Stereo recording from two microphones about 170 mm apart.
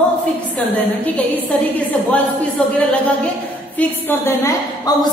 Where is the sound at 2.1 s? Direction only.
10° left (ahead or behind).